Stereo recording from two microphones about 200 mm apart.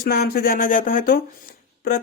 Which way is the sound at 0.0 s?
50° left (ahead or behind).